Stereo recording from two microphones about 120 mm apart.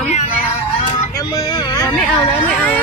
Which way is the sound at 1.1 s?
30° left (ahead or behind).